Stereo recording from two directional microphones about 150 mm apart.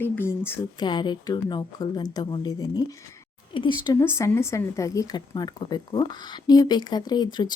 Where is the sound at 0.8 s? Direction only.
30° left (ahead or behind).